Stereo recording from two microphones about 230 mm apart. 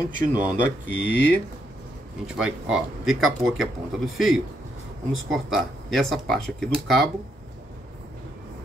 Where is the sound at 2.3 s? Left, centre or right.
Centre.